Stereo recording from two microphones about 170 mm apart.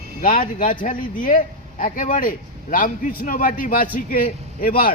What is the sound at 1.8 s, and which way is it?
A man's voice, 50° left (ahead or behind).